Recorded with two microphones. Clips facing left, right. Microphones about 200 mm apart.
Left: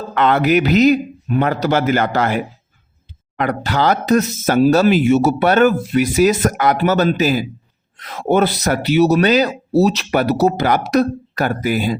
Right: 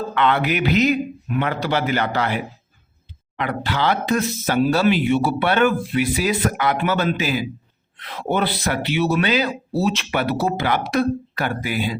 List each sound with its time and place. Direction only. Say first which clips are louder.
0.1 s speech: left 7 dB; 40° left (ahead or behind)